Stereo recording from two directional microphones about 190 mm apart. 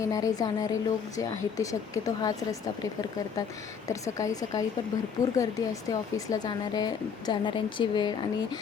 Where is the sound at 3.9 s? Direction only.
15° left (ahead or behind).